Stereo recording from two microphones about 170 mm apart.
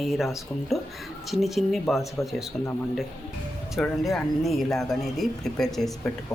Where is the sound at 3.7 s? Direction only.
Centre (ahead or behind).